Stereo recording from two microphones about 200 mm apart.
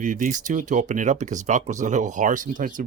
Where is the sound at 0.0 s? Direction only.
40° right (ahead or behind).